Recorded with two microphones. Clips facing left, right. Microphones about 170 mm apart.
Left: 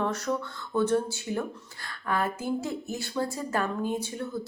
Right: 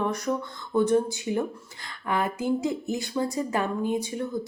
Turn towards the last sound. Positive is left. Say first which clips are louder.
# right 4 dB
turn(degrees=-15)  # may be behind; listen again after turning